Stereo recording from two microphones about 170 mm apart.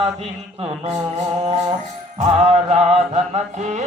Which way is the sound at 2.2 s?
40° right (ahead or behind).